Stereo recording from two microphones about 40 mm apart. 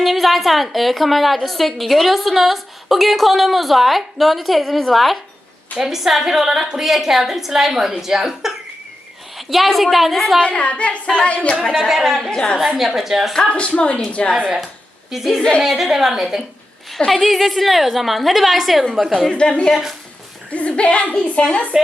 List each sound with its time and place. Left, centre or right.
0.0 s a woman's voice: centre
5.7 s a woman's voice: centre
9.5 s a woman's voice: centre
10.4 s a sound: left
11.9 s a woman's voice: centre
12.3 s a sound: left
12.5 s a woman's voice: centre
13.5 s a sound: left
14.1 s a woman's voice: left
15.1 s a woman's voice: centre
17.1 s a woman's voice: centre
19.3 s a sound: left
20.5 s a woman's voice: left